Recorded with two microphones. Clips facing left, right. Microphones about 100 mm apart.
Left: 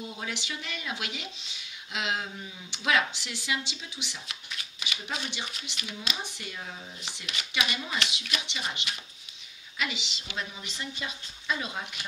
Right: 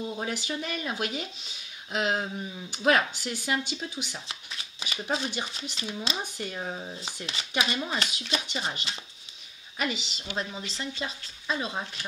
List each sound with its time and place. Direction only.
0.2 s speech: 40° right (ahead or behind)
4.3 s speech: 30° right (ahead or behind)